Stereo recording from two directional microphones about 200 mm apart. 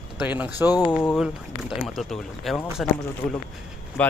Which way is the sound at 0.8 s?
10° left (ahead or behind).